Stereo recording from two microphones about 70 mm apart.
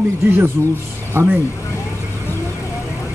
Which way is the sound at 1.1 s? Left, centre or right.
Right.